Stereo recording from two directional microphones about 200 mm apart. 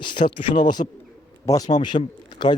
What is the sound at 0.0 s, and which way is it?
Speech, 25° left (ahead or behind).